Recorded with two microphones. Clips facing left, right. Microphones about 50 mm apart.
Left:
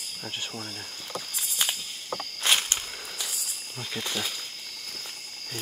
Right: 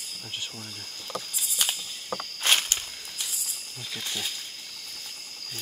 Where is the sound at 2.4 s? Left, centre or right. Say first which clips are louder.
Even; centre.